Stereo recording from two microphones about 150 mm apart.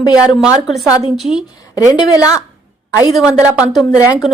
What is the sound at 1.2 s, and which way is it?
Speech, 5° right (ahead or behind).